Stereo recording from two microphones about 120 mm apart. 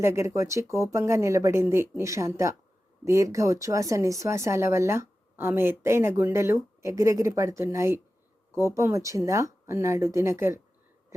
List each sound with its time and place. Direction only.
0.0 s speech: 20° right (ahead or behind)